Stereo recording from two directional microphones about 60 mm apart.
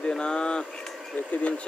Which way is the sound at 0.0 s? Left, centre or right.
Centre.